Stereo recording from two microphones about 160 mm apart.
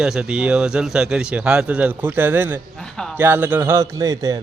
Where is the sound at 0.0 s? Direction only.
5° right (ahead or behind).